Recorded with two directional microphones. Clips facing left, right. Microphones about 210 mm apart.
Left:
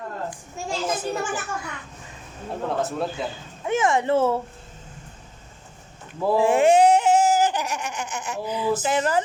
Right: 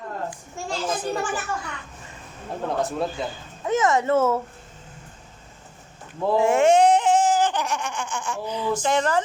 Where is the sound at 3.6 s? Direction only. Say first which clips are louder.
Right 1 dB; 20° left (ahead or behind).